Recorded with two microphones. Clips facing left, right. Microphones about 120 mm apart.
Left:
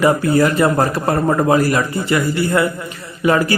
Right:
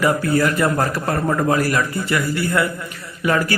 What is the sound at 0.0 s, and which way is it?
A man's voice, 25° left (ahead or behind).